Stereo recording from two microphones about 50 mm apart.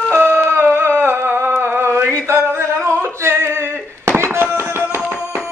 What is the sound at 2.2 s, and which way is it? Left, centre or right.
Singing, right.